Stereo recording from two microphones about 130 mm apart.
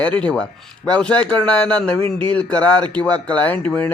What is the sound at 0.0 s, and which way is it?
Speech, 10° left (ahead or behind).